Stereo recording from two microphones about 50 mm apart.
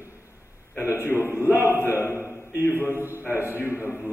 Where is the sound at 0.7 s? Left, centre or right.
Left.